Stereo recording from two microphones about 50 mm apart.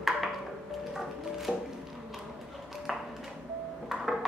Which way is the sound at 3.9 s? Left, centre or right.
Centre.